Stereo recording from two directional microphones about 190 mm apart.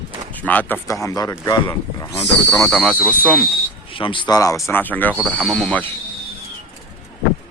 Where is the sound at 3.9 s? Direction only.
25° left (ahead or behind); by 5.2 s 10° left (ahead or behind).